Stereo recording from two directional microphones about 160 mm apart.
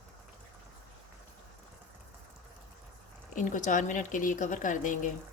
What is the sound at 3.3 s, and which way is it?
Speech, 55° left (ahead or behind).